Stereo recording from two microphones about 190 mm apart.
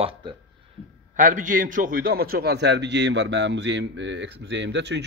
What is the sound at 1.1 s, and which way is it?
A man's voice, 40° right (ahead or behind).